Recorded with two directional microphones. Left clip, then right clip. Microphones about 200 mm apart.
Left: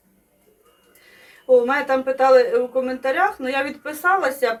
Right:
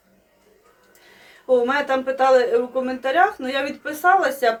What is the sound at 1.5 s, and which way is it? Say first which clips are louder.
Speech: left 2 dB; 20° right (ahead or behind).